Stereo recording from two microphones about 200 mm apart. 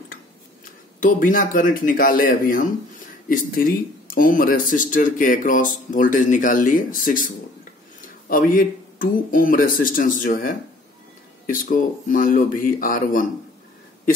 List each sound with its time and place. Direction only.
1.0 s speech: 40° left (ahead or behind)